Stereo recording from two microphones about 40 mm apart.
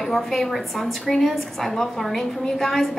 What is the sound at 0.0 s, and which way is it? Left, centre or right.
A woman's voice, centre.